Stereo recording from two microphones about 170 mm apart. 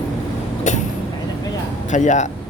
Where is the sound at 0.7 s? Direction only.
45° left (ahead or behind).